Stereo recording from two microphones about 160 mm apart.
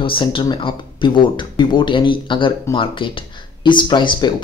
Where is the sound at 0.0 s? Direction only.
30° left (ahead or behind).